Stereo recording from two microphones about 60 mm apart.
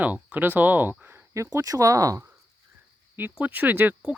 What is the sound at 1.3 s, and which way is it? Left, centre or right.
Speech, right.